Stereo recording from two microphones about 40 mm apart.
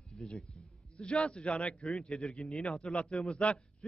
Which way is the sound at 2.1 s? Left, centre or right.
Centre.